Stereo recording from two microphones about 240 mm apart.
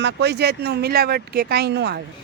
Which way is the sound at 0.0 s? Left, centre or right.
Right.